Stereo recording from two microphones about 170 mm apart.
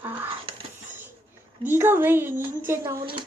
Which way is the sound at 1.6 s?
15° right (ahead or behind).